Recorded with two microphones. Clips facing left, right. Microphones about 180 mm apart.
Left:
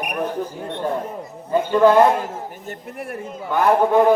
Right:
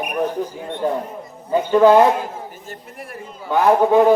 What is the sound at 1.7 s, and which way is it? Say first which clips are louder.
Speech: right 2 dB; 15° right (ahead or behind).